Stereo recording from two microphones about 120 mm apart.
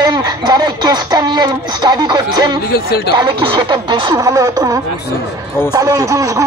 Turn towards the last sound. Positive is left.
turn(degrees=-25)  # may be behind; listen again after turning